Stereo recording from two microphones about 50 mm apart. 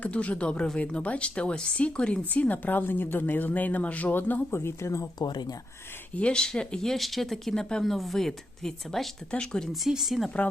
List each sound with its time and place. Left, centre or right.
0.0 s speech: left
2.3 s a woman's voice: left
4.5 s speech: left
6.1 s speech: centre
6.8 s speech: centre
9.3 s speech: centre
9.9 s speech: centre
10.2 s speech: left